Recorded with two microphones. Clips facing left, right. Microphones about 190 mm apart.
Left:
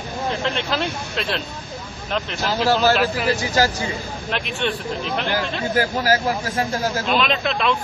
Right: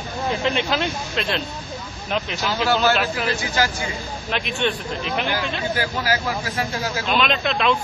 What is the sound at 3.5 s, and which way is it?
Speech, 40° left (ahead or behind).